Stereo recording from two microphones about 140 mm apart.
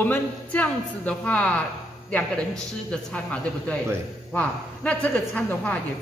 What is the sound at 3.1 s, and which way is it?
A woman's voice, 10° left (ahead or behind).